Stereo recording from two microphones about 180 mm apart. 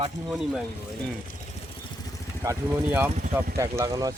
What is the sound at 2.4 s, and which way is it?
Speech, 10° right (ahead or behind).